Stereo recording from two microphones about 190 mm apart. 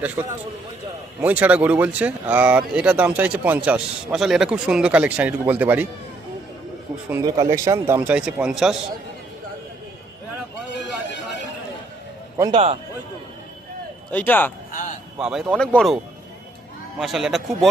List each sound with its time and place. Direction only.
0.2 s a man's voice: 20° right (ahead or behind)
1.2 s speech: 10° right (ahead or behind)
7.1 s speech: 20° right (ahead or behind); by 8.8 s 5° right (ahead or behind)
12.5 s a man's voice: 35° right (ahead or behind)
14.1 s speech: 10° left (ahead or behind)
14.7 s a sound: 45° left (ahead or behind)
15.2 s speech: 5° right (ahead or behind)
17.0 s speech: centre (ahead or behind)